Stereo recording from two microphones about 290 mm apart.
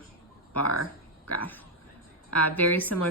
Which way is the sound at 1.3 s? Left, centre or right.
Centre.